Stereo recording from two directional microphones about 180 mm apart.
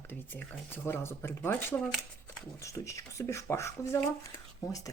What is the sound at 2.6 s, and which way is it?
Speech, 15° left (ahead or behind).